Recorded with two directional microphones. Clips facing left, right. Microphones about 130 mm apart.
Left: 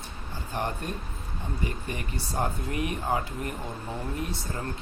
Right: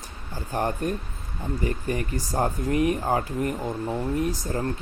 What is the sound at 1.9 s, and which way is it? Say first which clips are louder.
Speech: right 7 dB; 40° right (ahead or behind).